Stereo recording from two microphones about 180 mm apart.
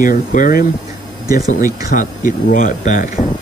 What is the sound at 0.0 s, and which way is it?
Speech, 50° left (ahead or behind).